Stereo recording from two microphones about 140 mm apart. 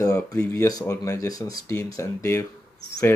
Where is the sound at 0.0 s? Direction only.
25° left (ahead or behind).